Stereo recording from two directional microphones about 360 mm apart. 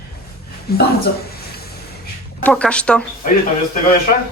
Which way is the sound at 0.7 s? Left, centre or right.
Left.